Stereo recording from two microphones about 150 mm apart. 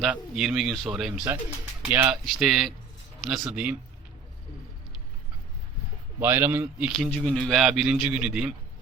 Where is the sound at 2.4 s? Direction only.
5° right (ahead or behind).